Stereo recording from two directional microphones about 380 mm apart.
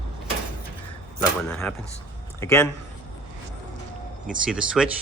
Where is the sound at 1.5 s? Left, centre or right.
Centre.